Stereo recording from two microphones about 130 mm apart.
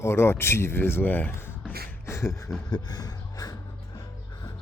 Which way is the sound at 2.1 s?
20° left (ahead or behind).